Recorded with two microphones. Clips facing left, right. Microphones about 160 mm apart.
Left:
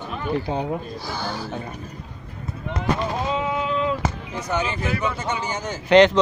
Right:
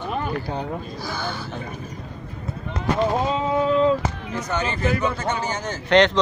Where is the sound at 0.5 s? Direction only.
20° left (ahead or behind).